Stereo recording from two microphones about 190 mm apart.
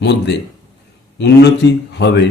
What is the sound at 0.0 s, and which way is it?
Speech, 65° left (ahead or behind).